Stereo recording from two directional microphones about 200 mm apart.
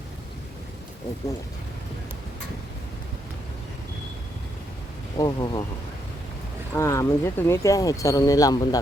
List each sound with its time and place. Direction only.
5.1 s speech: 20° left (ahead or behind)
6.7 s speech: 15° left (ahead or behind)